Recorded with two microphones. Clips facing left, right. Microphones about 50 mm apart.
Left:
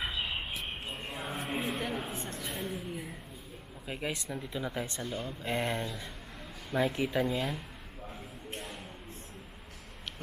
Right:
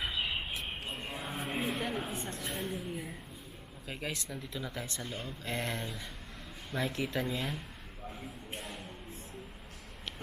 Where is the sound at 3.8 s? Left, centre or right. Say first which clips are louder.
Left 3 dB; centre.